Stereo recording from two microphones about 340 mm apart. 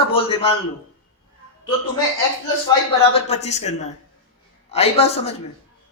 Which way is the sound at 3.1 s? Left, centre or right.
Centre.